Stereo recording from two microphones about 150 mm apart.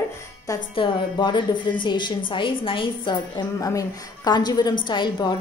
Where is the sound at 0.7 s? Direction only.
35° left (ahead or behind).